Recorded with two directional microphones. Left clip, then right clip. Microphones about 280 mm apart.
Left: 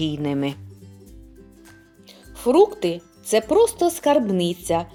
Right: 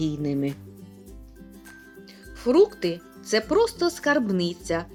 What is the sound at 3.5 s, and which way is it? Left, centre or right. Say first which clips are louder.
Speech: left 5 dB; centre.